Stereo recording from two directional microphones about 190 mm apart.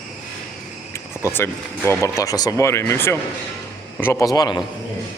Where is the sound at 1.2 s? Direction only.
10° left (ahead or behind).